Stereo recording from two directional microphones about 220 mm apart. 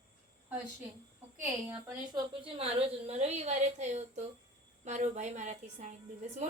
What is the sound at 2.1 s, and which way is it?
A woman's voice, 25° right (ahead or behind).